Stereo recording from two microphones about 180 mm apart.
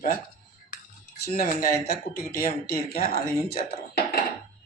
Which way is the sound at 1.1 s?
55° left (ahead or behind).